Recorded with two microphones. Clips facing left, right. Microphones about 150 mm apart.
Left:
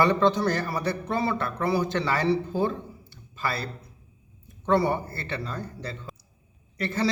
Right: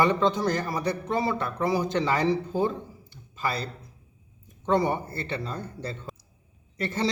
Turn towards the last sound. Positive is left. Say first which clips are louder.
# left 1 dB
turn(degrees=-25)  # may be behind; listen again after turning